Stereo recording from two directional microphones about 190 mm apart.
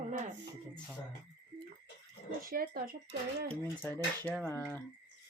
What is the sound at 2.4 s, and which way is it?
Speech, 50° right (ahead or behind).